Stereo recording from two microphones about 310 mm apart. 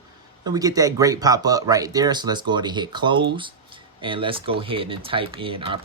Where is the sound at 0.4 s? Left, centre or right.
Centre.